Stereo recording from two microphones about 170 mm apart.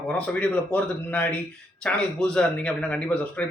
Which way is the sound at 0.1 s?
5° left (ahead or behind).